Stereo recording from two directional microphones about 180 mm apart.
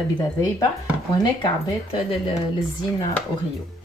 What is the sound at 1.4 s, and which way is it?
Speech, 30° left (ahead or behind).